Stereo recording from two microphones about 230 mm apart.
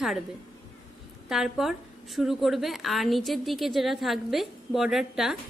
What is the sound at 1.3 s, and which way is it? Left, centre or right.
A woman's voice, centre.